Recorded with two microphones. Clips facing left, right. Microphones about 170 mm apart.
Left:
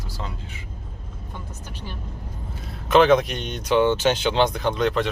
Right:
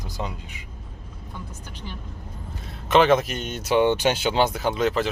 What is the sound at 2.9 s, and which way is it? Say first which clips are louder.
Speech: left 2 dB; centre (ahead or behind).